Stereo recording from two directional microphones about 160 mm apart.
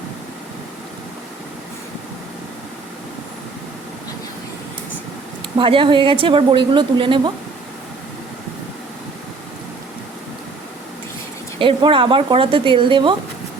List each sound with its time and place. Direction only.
5.5 s a woman's voice: 30° right (ahead or behind)
11.6 s a woman's voice: 35° right (ahead or behind)